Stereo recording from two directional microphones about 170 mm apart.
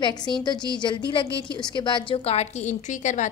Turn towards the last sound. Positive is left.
turn(degrees=45)  # may be behind; listen again after turning